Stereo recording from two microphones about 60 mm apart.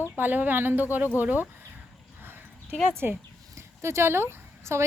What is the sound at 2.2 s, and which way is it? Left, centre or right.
Dog, right.